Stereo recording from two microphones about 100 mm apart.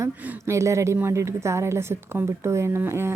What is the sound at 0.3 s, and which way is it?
A woman's voice, 30° right (ahead or behind).